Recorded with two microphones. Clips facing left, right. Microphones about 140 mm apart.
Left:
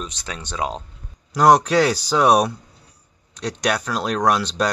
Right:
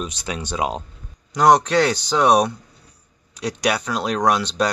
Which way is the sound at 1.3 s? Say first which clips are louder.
Left 1 dB; 5° left (ahead or behind).